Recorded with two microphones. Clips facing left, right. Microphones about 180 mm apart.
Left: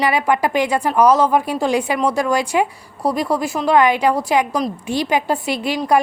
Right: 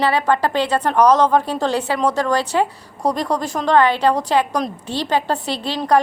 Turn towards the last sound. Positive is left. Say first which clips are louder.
# even
turn(degrees=10)  # may be behind; listen again after turning